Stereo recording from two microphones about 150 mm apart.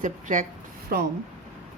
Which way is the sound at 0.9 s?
90° right.